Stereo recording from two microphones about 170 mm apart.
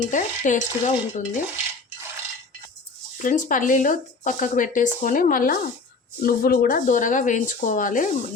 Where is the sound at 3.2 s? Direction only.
50° left (ahead or behind).